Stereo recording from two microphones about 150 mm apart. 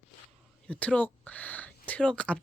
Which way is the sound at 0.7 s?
10° left (ahead or behind).